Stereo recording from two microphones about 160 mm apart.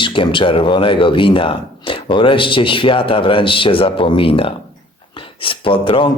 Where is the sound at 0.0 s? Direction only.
30° left (ahead or behind).